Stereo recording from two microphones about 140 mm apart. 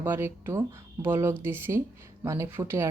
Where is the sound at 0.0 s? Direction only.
15° right (ahead or behind).